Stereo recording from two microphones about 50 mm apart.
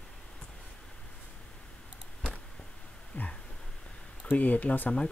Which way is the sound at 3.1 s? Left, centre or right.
Left.